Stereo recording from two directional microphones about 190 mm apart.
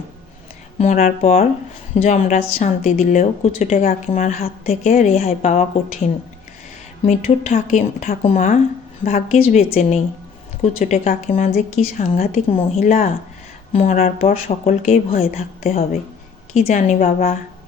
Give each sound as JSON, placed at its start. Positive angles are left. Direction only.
{"t": 0.8, "sound": "a woman's voice", "side_deg": 40}